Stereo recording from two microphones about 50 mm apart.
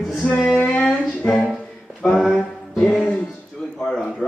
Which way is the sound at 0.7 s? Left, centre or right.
Centre.